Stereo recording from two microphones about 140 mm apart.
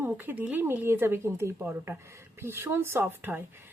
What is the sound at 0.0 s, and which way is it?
Speech, 15° right (ahead or behind).